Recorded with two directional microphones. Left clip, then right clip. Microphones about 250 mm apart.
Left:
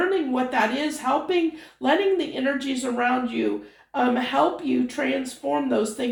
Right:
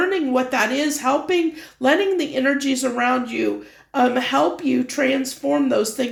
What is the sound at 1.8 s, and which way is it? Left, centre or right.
Speech, right.